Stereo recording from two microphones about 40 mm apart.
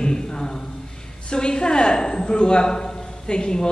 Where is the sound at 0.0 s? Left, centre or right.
Centre.